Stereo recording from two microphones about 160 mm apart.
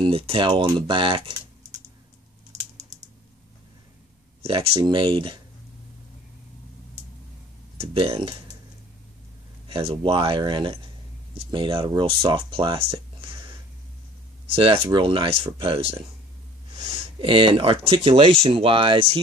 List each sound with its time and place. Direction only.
0.0 s speech: 35° right (ahead or behind)
4.4 s speech: 35° right (ahead or behind)
7.7 s speech: 35° right (ahead or behind)
9.7 s speech: 35° right (ahead or behind)
14.5 s speech: 35° right (ahead or behind)